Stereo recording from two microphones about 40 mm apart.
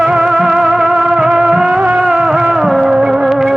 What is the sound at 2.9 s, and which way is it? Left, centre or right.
Music, centre.